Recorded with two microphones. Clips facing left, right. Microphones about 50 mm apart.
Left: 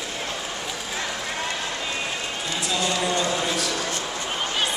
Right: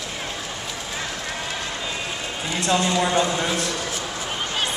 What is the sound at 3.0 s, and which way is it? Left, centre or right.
Speech, right.